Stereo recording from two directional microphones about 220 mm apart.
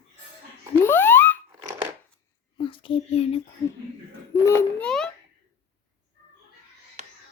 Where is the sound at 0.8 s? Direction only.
10° left (ahead or behind).